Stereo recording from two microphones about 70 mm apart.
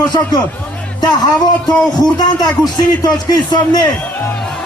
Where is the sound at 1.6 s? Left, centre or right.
Left.